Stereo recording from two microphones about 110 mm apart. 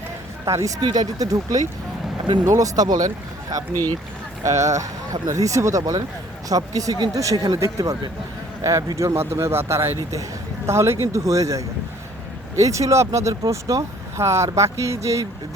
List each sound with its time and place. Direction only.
0.4 s speech: 30° right (ahead or behind)
4.4 s speech: 30° right (ahead or behind)